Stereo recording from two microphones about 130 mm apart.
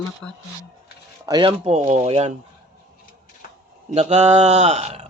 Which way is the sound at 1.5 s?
50° right (ahead or behind).